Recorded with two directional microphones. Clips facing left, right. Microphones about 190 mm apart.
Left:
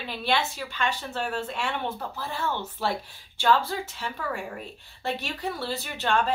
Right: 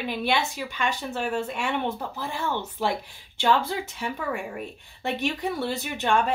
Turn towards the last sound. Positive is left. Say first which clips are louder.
# right 2 dB
turn(degrees=-15)  # may be behind; listen again after turning